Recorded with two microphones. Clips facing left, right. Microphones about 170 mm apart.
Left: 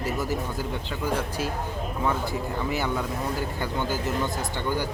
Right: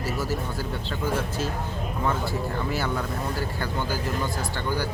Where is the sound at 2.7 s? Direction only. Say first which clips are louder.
Even; 15° left (ahead or behind).